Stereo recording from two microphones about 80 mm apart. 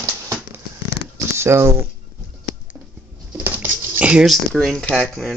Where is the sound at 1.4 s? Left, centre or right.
Right.